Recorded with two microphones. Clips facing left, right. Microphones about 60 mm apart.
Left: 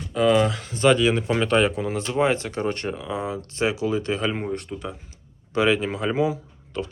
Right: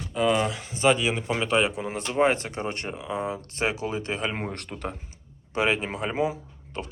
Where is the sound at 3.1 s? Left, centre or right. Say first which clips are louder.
Left 1 dB; right.